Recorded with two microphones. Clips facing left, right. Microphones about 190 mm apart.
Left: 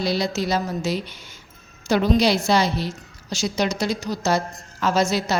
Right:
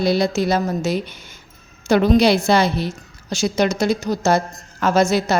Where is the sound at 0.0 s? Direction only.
55° right (ahead or behind).